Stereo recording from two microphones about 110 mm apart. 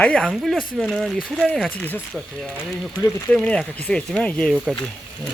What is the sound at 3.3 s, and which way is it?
Speech, 10° left (ahead or behind).